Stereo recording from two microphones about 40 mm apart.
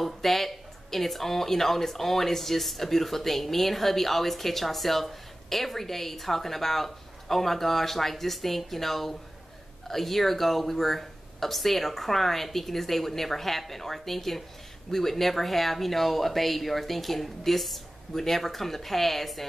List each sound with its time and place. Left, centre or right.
0.0 s speech: centre